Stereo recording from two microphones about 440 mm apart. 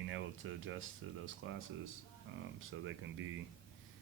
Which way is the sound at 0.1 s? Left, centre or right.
Right.